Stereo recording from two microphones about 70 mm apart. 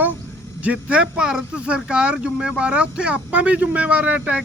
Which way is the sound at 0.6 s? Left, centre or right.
Centre.